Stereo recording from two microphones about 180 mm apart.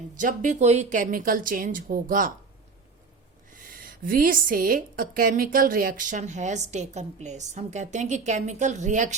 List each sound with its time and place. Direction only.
0.2 s a woman's voice: 45° right (ahead or behind)
3.5 s a woman's voice: 50° right (ahead or behind)